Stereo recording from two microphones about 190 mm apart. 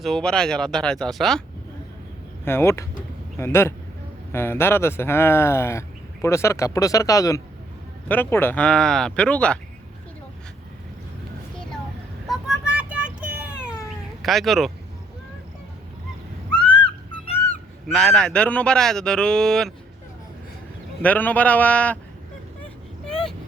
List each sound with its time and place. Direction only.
0.0 s speech: centre (ahead or behind)
2.4 s speech: 10° left (ahead or behind)
12.3 s a sound: 5° right (ahead or behind)
14.2 s speech: centre (ahead or behind)
16.5 s a sound: 5° left (ahead or behind)
17.8 s speech: centre (ahead or behind)
21.0 s speech: 10° left (ahead or behind)